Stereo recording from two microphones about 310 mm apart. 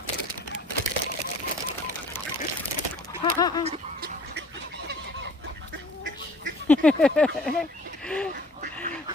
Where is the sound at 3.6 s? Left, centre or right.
Right.